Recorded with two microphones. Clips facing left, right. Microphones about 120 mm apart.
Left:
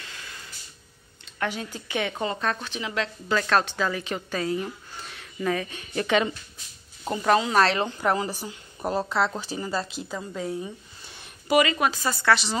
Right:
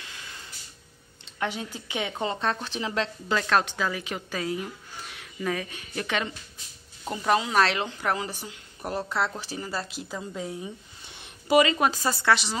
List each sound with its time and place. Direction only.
1.4 s speech: 20° right (ahead or behind)
2.6 s speech: 35° right (ahead or behind)
3.3 s speech: 10° right (ahead or behind)
8.1 s speech: 35° left (ahead or behind)
9.6 s a woman's voice: 5° right (ahead or behind)
11.4 s a woman's voice: 25° right (ahead or behind)
12.3 s speech: 15° right (ahead or behind)